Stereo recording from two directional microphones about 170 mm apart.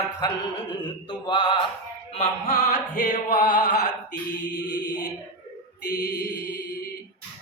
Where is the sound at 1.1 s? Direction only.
30° left (ahead or behind).